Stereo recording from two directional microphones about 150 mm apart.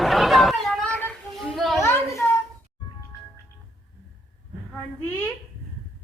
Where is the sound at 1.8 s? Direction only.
20° left (ahead or behind).